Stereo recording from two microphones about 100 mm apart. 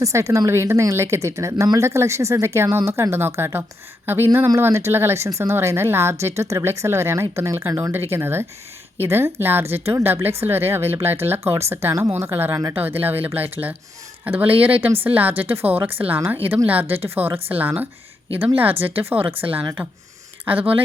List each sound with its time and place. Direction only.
0.0 s speech: 30° right (ahead or behind)
19.1 s speech: 65° right (ahead or behind)
19.4 s speech: 15° right (ahead or behind)